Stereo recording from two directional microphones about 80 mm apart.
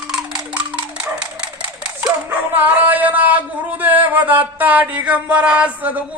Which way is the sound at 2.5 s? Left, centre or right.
Right.